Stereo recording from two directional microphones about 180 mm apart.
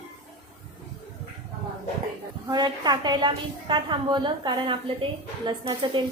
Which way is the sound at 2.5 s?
25° right (ahead or behind).